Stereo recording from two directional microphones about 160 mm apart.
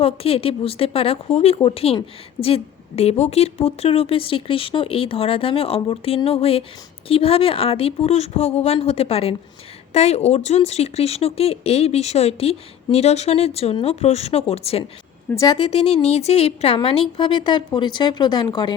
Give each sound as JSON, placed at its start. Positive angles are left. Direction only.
{"t": 0.0, "sound": "speech", "side_deg": 35}